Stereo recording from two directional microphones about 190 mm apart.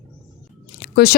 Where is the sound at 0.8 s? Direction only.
55° left (ahead or behind).